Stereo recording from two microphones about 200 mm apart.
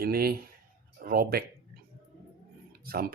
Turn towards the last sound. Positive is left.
turn(degrees=-50)  # may be behind; listen again after turning